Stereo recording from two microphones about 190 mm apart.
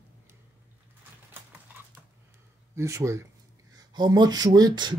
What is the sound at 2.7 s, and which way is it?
Speech, 15° right (ahead or behind).